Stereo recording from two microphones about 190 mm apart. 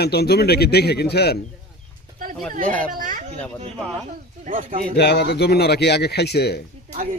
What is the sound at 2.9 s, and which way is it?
Speech, 45° right (ahead or behind).